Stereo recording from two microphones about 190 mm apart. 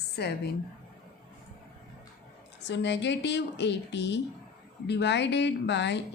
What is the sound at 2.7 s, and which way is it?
A woman's voice, 65° left (ahead or behind).